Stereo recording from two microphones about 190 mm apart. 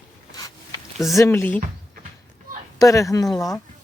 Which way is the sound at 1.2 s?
10° left (ahead or behind).